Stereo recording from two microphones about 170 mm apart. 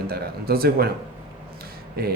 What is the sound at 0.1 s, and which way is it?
Speech, 60° right (ahead or behind).